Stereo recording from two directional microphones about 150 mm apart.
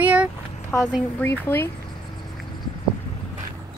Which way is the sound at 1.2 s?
15° left (ahead or behind).